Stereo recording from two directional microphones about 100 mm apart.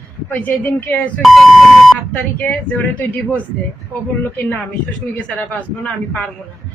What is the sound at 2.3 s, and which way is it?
Speech, 15° left (ahead or behind).